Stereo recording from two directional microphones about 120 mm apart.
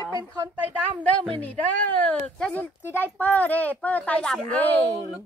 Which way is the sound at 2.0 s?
10° left (ahead or behind).